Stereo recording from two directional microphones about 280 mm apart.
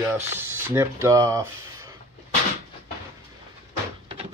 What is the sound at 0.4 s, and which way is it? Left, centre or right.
Speech, centre.